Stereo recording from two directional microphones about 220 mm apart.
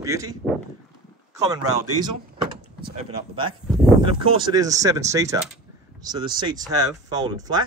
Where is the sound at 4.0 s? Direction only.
20° right (ahead or behind).